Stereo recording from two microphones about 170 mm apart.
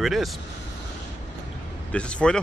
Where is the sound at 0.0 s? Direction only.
Centre (ahead or behind).